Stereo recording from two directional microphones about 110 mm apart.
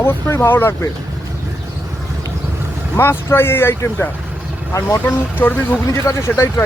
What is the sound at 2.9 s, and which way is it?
Speech, 25° left (ahead or behind).